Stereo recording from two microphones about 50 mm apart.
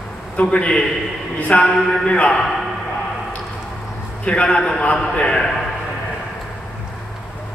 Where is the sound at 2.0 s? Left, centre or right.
Left.